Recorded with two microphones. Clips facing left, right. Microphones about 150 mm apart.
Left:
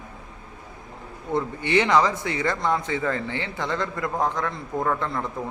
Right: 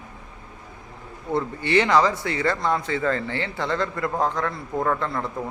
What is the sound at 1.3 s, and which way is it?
A man's voice, 15° left (ahead or behind).